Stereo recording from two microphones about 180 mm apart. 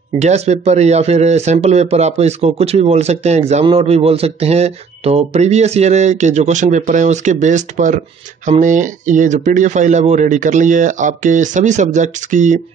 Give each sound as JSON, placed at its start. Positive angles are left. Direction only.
{"t": 0.2, "sound": "speech", "side_deg": -40}